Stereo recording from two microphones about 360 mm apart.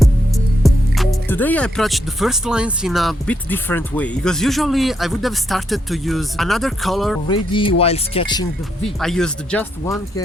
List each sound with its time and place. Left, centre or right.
0.6 s speech: centre
7.3 s speech: centre
9.0 s speech: centre